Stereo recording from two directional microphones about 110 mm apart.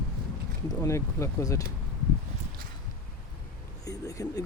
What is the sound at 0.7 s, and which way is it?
Speech, 30° left (ahead or behind).